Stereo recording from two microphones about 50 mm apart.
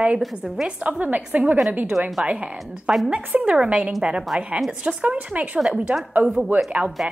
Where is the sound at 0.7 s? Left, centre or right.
Right.